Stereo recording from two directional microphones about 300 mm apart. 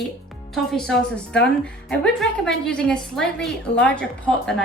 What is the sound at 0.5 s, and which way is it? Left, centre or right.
A woman's voice, centre.